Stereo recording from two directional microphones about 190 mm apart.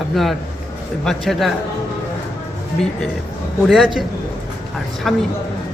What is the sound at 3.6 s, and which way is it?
Speech, centre (ahead or behind).